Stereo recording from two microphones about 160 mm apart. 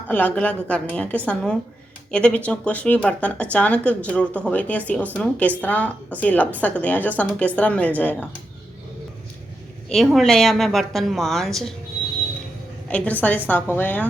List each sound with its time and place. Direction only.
0.1 s speech: 10° left (ahead or behind)
9.9 s a woman's voice: centre (ahead or behind)
12.9 s speech: 10° left (ahead or behind)